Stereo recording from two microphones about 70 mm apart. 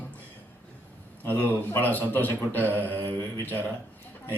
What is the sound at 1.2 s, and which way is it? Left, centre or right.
A man's voice, left.